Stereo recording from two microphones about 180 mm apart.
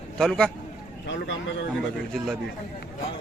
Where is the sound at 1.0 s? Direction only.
90° left.